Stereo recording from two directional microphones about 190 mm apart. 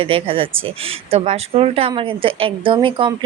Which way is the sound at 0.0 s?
30° right (ahead or behind).